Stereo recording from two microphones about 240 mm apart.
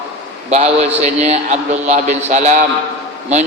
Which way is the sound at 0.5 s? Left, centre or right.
Right.